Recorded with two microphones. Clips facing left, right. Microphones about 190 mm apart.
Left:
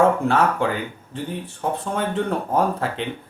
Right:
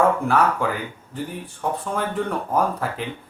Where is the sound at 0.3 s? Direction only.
25° left (ahead or behind).